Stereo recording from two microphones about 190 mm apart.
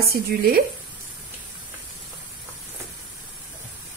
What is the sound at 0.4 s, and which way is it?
Speech, 55° right (ahead or behind).